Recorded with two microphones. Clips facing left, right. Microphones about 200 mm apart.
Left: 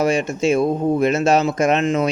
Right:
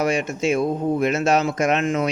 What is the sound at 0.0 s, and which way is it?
Speech, 30° left (ahead or behind).